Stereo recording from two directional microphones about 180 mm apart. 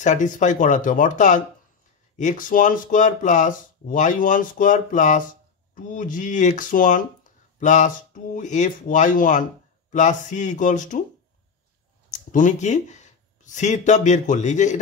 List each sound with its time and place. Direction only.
0.0 s speech: 45° left (ahead or behind)
12.1 s speech: 45° left (ahead or behind)